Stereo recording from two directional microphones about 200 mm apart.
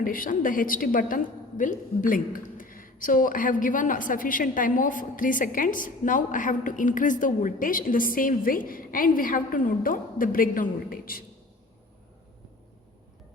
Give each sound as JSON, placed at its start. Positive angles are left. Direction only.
{"t": 0.0, "sound": "a woman's voice", "side_deg": 45}